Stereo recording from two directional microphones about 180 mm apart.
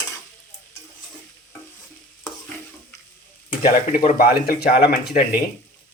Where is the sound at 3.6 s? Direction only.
45° left (ahead or behind).